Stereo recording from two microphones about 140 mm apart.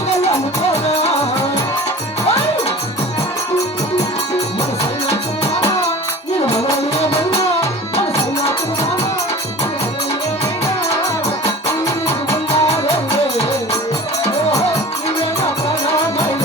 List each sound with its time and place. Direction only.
0.7 s music: 50° left (ahead or behind)
4.8 s music: 50° left (ahead or behind)
6.9 s music: 50° left (ahead or behind)
12.0 s music: 50° left (ahead or behind)